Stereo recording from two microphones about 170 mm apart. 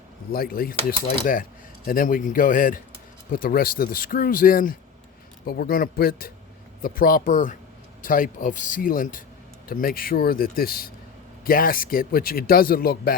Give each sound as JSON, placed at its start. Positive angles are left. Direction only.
{"t": 0.3, "sound": "a man's voice", "side_deg": 60}